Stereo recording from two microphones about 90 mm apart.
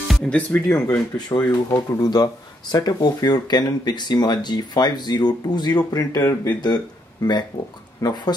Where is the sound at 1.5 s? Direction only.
45° left (ahead or behind).